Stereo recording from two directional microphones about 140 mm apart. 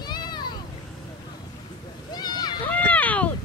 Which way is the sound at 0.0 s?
30° left (ahead or behind).